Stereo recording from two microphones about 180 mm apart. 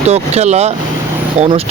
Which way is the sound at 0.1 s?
35° right (ahead or behind).